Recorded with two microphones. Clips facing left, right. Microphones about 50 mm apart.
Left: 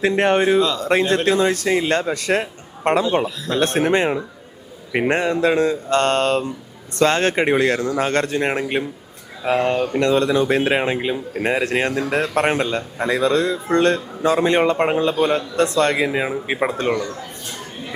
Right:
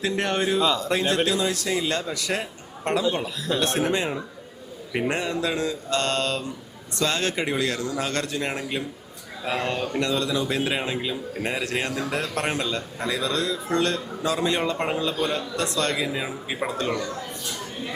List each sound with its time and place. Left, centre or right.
0.0 s speech: left
3.2 s speech: centre
3.6 s speech: left
9.4 s speech: left
10.0 s speech: left